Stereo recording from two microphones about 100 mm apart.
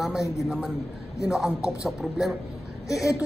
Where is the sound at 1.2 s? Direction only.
5° right (ahead or behind).